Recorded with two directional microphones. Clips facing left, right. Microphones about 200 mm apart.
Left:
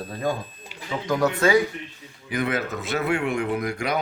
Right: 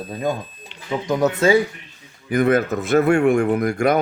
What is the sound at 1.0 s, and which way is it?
Speech, 20° right (ahead or behind).